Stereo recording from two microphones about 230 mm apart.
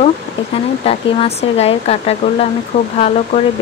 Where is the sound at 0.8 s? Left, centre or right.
Left.